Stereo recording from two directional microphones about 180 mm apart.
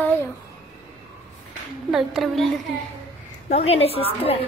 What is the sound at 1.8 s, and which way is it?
Speech, centre (ahead or behind).